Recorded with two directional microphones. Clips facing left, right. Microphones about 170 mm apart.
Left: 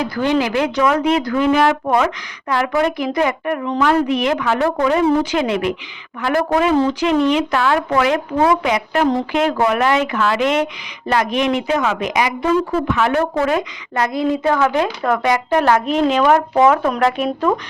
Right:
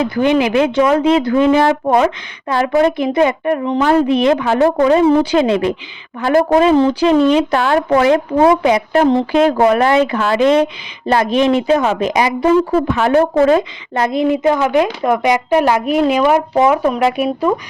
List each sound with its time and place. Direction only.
0.0 s a woman's voice: 20° right (ahead or behind)